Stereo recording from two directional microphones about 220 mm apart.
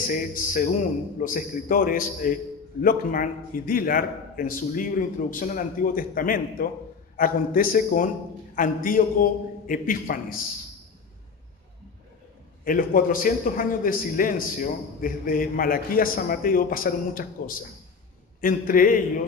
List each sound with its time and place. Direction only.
0.1 s a man's voice: 40° left (ahead or behind)
12.6 s a man's voice: 40° left (ahead or behind)